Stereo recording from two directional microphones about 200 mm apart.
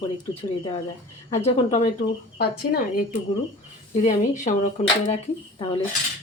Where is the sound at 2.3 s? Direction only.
50° left (ahead or behind).